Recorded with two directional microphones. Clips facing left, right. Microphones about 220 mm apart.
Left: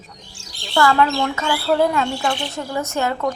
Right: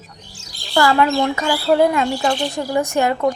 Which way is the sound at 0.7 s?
15° right (ahead or behind).